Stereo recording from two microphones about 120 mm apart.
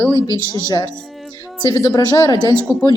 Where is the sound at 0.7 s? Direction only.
35° left (ahead or behind).